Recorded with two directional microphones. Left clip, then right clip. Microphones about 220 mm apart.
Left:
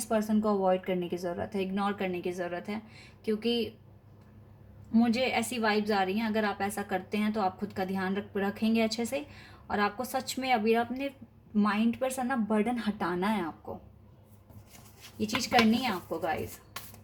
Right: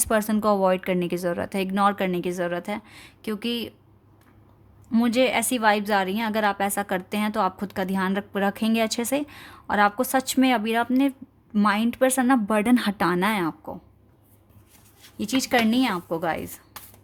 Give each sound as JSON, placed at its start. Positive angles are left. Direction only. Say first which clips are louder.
{"t": 0.0, "sound": "a woman's voice", "louder": "right 7 dB", "side_deg": -50}
{"t": 4.9, "sound": "a woman's voice", "louder": "right 7 dB", "side_deg": -50}
{"t": 15.2, "sound": "a woman's voice", "louder": "right 4 dB", "side_deg": -50}